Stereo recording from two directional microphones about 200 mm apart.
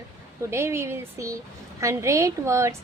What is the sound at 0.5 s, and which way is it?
A woman's voice, 15° right (ahead or behind).